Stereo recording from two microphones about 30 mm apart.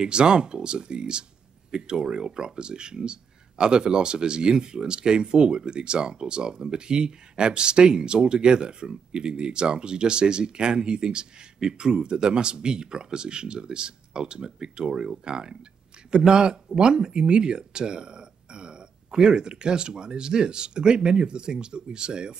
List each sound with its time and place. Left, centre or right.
0.0 s speech: right